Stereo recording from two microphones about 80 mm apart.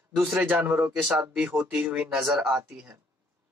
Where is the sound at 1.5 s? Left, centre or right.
Right.